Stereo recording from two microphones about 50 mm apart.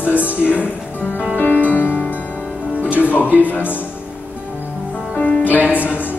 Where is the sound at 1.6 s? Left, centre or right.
Left.